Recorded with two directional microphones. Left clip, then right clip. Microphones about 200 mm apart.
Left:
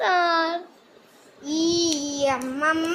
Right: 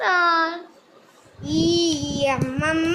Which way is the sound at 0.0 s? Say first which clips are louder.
Right 2 dB; centre (ahead or behind).